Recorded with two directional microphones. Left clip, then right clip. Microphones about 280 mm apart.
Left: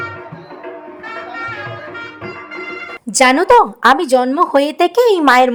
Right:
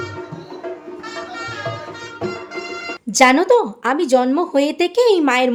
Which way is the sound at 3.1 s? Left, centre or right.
Centre.